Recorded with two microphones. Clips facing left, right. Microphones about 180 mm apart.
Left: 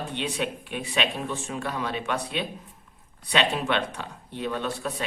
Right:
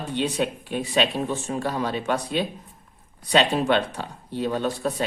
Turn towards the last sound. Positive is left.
turn(degrees=-40)  # may be behind; listen again after turning